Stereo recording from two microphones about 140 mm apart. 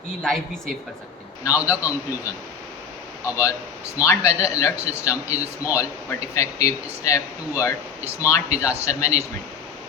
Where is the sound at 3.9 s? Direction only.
20° left (ahead or behind).